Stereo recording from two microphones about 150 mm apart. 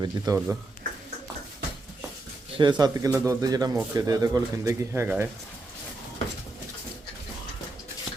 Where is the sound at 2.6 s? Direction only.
30° right (ahead or behind).